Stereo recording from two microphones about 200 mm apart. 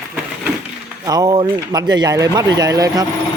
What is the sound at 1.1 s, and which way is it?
Speech, 20° right (ahead or behind).